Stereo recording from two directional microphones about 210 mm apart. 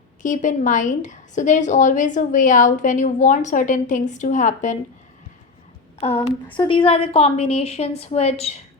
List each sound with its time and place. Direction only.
0.2 s a woman's voice: 35° left (ahead or behind)
6.0 s a woman's voice: 25° left (ahead or behind)